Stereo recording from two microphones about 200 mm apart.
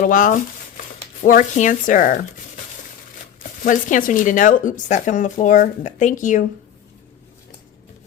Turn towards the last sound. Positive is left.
turn(degrees=40)  # may be behind; listen again after turning